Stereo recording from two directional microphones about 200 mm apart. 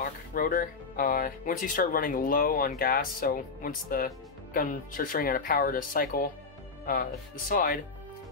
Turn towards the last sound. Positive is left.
turn(degrees=45)  # may be behind; listen again after turning